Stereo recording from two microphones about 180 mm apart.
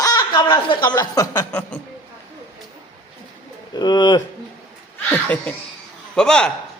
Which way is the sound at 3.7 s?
25° left (ahead or behind).